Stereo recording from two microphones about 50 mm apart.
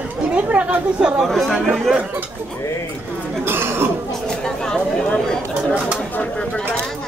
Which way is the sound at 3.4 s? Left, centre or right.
Right.